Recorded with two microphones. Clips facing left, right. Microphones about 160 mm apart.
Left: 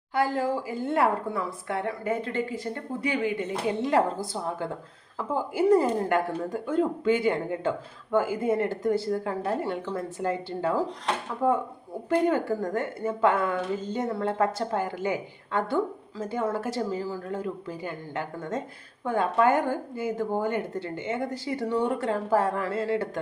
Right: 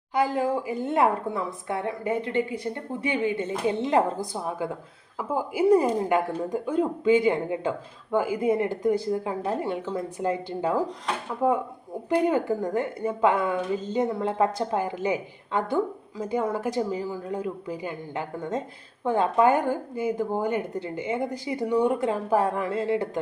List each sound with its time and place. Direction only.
0.1 s a woman's voice: 20° right (ahead or behind)